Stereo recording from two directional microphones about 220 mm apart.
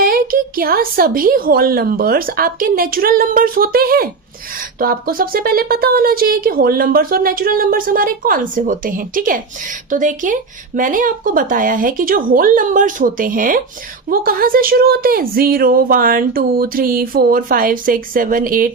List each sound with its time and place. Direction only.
0.0 s speech: 40° right (ahead or behind)